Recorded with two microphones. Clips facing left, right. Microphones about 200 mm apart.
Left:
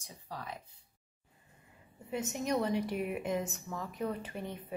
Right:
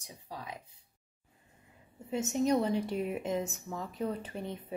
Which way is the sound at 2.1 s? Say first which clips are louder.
Right 5 dB; 25° right (ahead or behind).